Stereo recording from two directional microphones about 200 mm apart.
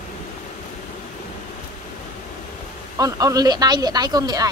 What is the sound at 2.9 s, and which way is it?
A man's voice, 15° right (ahead or behind).